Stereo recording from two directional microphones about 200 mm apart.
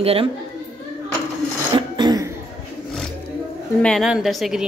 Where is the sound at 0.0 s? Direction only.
30° right (ahead or behind).